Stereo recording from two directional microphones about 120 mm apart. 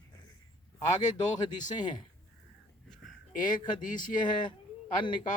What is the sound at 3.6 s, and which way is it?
Speech, 40° left (ahead or behind).